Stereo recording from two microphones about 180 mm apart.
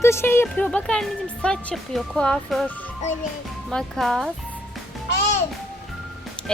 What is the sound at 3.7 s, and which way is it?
Speech, centre (ahead or behind).